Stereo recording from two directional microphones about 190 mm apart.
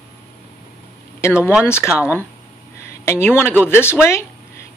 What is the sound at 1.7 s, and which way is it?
Speech, 15° left (ahead or behind).